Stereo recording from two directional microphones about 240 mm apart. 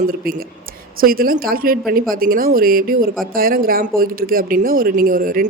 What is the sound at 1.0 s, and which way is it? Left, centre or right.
A woman's voice, right.